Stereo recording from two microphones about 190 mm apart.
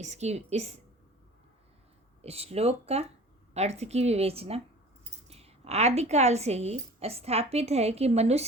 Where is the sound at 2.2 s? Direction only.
35° right (ahead or behind).